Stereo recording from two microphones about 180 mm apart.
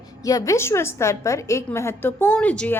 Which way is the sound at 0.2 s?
20° left (ahead or behind).